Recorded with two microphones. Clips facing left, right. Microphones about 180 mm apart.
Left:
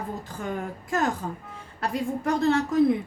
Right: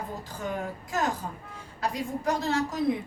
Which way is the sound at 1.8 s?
60° left (ahead or behind).